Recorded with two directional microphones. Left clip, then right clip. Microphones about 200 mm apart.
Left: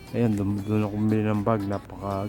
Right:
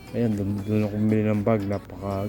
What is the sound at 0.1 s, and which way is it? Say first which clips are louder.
Speech: left 1 dB; 20° left (ahead or behind).